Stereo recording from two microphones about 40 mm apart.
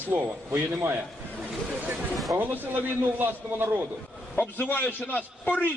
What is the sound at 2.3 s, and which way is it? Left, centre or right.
Speech, right.